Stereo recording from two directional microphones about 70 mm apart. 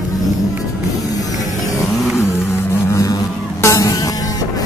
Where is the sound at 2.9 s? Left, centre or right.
Left.